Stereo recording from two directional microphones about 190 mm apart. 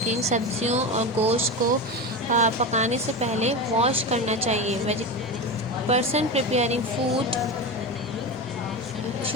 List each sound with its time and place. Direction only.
0.1 s speech: 35° right (ahead or behind)